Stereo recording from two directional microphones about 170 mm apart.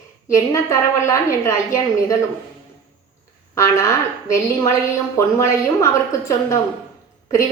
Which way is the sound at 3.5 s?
15° left (ahead or behind).